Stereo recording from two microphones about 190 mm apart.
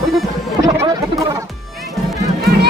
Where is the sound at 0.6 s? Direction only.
20° right (ahead or behind).